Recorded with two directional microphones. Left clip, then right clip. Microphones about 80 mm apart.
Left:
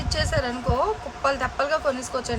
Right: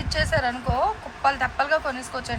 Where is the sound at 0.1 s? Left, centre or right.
Left.